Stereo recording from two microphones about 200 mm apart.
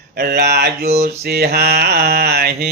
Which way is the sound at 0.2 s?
55° right (ahead or behind).